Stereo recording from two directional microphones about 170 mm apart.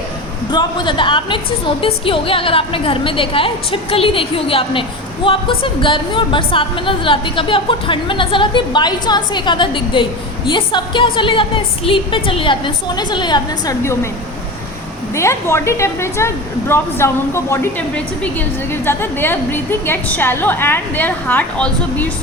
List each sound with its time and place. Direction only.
0.5 s a woman's voice: 30° left (ahead or behind)
15.1 s a woman's voice: 15° left (ahead or behind)